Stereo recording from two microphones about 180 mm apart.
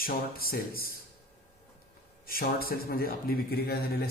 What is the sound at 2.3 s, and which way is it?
Speech, 55° left (ahead or behind).